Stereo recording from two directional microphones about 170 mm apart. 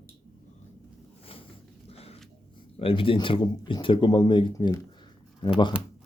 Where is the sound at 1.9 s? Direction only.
35° left (ahead or behind).